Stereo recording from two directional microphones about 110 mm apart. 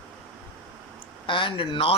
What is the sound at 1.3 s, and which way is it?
Speech, 50° left (ahead or behind).